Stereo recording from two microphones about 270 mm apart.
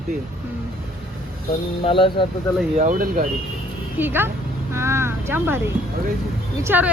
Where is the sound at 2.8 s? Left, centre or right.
Right.